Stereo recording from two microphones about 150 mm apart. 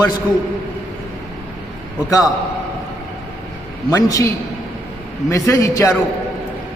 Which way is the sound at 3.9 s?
20° left (ahead or behind).